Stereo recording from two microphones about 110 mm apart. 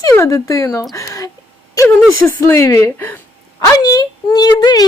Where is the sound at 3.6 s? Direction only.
30° left (ahead or behind).